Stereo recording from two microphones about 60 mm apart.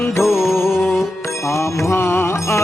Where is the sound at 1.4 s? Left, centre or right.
Left.